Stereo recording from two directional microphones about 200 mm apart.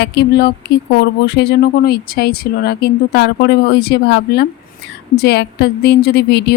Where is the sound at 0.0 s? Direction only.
55° left (ahead or behind).